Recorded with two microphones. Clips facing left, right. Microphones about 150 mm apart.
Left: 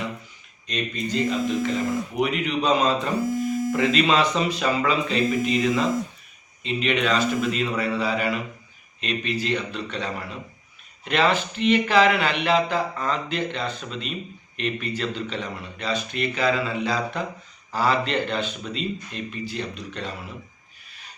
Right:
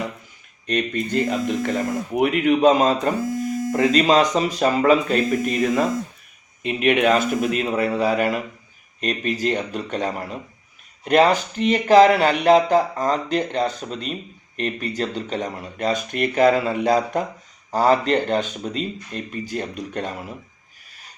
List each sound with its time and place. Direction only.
0.7 s speech: 55° right (ahead or behind)